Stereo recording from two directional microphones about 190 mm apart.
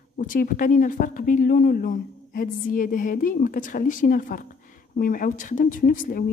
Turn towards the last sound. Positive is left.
turn(degrees=45)  # may be behind; listen again after turning